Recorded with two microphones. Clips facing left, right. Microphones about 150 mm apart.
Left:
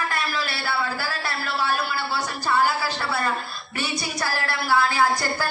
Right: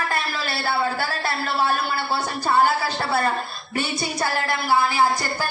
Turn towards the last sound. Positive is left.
turn(degrees=-15)  # may be behind; listen again after turning